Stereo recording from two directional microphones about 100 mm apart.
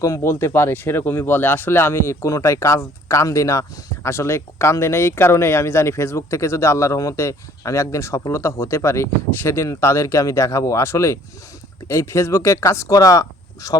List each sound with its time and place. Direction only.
0.0 s speech: 30° left (ahead or behind)